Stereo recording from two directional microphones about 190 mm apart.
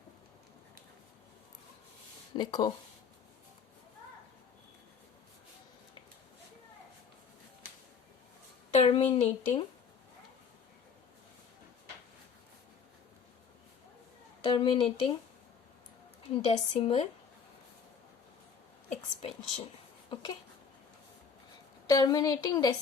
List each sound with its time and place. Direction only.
2.3 s a woman's voice: 25° left (ahead or behind)
8.7 s a sound: 35° left (ahead or behind)
9.1 s speech: 35° left (ahead or behind)
14.4 s a woman's voice: 25° left (ahead or behind)
16.3 s a woman's voice: 30° left (ahead or behind)
18.9 s speech: 35° left (ahead or behind)
20.1 s a woman's voice: 25° left (ahead or behind)
21.8 s a woman's voice: 20° left (ahead or behind)